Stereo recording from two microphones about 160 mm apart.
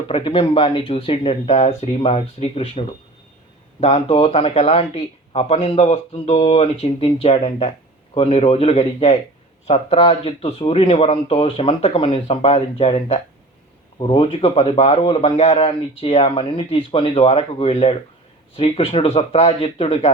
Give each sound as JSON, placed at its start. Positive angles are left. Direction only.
{"t": 0.1, "sound": "speech", "side_deg": 35}